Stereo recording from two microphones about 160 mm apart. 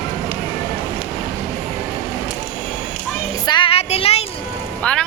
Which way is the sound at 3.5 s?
30° left (ahead or behind).